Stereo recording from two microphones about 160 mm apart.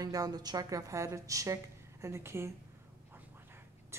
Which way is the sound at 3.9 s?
15° right (ahead or behind).